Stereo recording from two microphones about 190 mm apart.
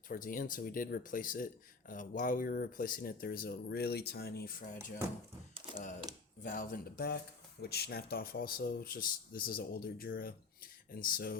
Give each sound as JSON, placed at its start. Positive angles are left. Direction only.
{"t": 0.1, "sound": "speech", "side_deg": 45}
{"t": 6.4, "sound": "speech", "side_deg": 45}